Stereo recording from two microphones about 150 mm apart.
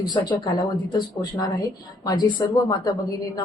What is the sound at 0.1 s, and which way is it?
A woman's voice, 30° left (ahead or behind).